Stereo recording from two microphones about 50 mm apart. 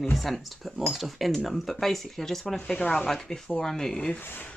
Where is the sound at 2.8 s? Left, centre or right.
Centre.